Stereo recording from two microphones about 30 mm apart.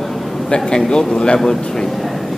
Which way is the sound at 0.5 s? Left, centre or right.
Left.